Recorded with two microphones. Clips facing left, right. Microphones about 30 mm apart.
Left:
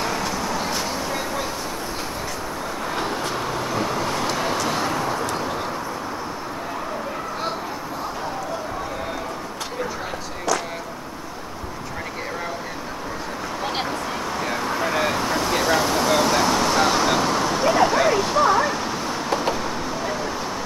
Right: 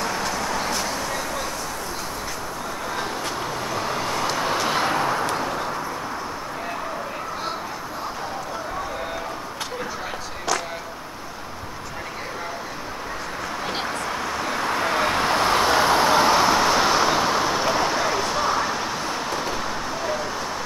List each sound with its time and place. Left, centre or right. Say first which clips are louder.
0.0 s bird: left 1 dB; centre
0.7 s vehicle: even; centre
3.3 s vehicle: left 2 dB; centre
4.6 s vehicle: right 1 dB; right
14.6 s vehicle: right 3 dB; centre
15.1 s vehicle: right 2 dB; right
15.5 s vehicle: right 1 dB; right; by 20.2 s centre